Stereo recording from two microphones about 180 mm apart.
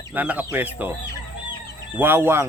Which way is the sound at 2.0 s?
10° right (ahead or behind).